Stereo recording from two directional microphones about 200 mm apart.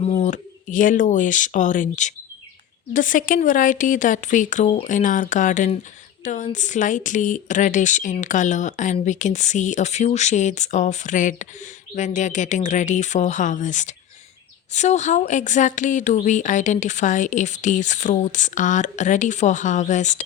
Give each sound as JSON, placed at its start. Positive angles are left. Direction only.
{"t": 0.0, "sound": "speech", "side_deg": 30}